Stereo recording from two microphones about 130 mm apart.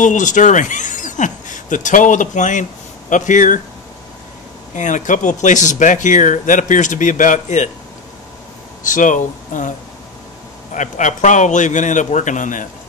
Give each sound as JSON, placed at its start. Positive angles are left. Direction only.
{"t": 0.0, "sound": "speech", "side_deg": 75}
{"t": 4.7, "sound": "speech", "side_deg": 75}
{"t": 8.8, "sound": "speech", "side_deg": 80}
{"t": 10.7, "sound": "speech", "side_deg": 70}